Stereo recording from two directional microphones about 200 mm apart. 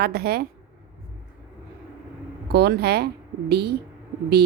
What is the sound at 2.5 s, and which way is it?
A woman's voice, 55° right (ahead or behind).